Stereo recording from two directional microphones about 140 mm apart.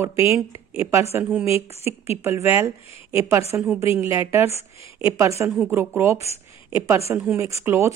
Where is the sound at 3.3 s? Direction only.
20° right (ahead or behind).